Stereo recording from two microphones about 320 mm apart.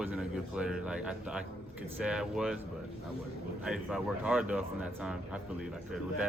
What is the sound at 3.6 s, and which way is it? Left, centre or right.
Speech, centre.